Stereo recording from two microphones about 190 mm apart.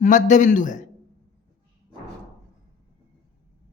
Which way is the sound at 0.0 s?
40° left (ahead or behind).